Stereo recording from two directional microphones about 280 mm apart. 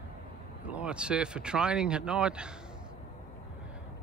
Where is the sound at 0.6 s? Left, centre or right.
Centre.